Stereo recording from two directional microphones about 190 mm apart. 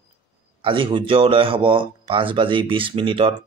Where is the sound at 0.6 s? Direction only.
25° right (ahead or behind).